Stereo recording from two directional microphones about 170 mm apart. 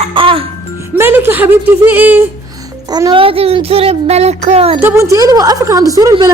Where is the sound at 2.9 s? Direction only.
25° right (ahead or behind).